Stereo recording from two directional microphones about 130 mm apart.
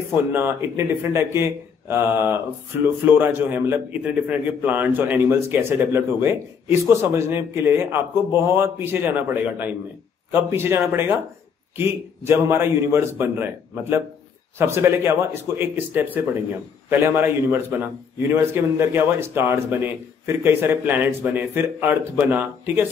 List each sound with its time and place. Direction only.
0.1 s a man's voice: 15° right (ahead or behind)